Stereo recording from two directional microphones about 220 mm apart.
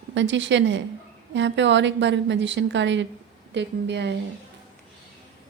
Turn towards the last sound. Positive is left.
turn(degrees=-50)  # may be behind; listen again after turning